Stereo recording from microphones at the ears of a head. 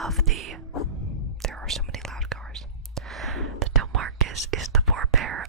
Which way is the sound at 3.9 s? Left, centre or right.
Right.